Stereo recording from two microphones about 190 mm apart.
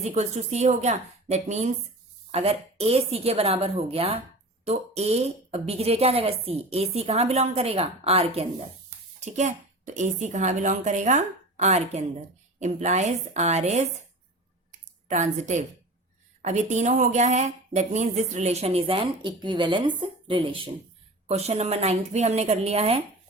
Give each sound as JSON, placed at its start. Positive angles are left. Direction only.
{"t": 0.0, "sound": "speech", "side_deg": -35}
{"t": 14.7, "sound": "a sound", "side_deg": -40}
{"t": 16.4, "sound": "speech", "side_deg": -35}